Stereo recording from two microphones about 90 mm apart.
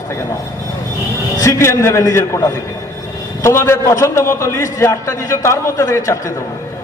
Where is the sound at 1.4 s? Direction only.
35° left (ahead or behind).